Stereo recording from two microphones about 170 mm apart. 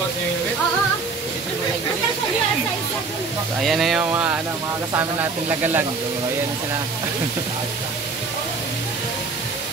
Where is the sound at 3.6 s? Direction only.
Centre (ahead or behind).